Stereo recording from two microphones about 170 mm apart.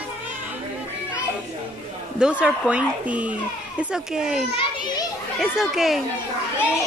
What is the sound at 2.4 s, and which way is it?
A child's voice, 5° right (ahead or behind).